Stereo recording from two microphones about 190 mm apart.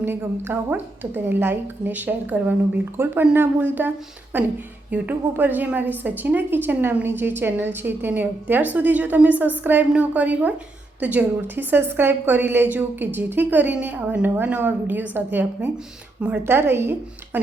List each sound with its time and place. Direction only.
0.0 s a woman's voice: 10° right (ahead or behind)